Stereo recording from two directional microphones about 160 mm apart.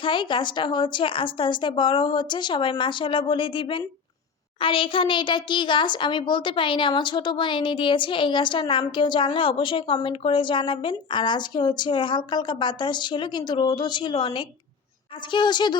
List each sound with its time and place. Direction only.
0.0 s a woman's voice: 30° left (ahead or behind)